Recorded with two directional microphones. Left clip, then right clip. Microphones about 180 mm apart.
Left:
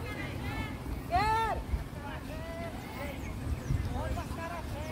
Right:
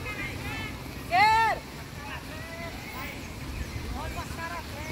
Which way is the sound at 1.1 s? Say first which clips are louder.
Right 8 dB; 60° left (ahead or behind).